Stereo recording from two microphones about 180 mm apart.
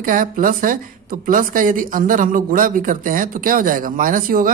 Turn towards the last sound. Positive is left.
turn(degrees=-50)  # may be behind; listen again after turning